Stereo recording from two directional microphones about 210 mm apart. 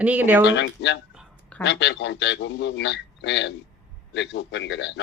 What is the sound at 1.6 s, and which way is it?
A man's voice, 55° left (ahead or behind).